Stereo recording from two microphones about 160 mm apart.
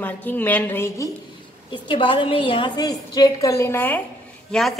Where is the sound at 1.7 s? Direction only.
30° left (ahead or behind).